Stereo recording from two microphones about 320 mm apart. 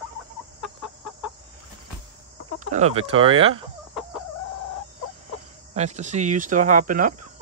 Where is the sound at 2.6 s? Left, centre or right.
Right.